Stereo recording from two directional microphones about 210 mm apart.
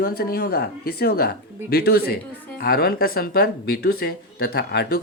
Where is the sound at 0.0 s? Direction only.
45° left (ahead or behind).